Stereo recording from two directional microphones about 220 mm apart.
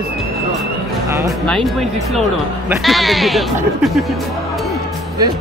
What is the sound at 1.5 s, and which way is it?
Speech, centre (ahead or behind).